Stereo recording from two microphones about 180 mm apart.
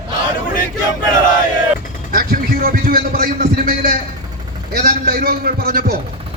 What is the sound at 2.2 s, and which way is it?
A man's voice, 55° right (ahead or behind).